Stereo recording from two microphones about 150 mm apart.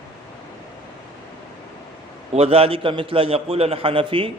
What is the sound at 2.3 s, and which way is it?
A man's voice, 40° right (ahead or behind).